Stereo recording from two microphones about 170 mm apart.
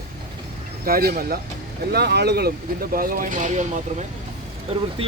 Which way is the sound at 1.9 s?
75° right (ahead or behind).